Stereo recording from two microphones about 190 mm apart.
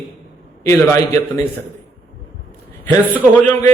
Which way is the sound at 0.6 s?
15° left (ahead or behind).